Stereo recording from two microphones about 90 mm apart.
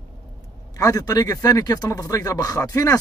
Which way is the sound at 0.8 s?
40° left (ahead or behind).